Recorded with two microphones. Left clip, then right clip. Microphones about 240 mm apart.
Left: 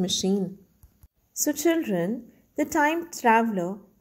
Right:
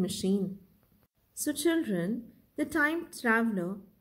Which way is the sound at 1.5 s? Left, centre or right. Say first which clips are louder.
Left 5 dB; left.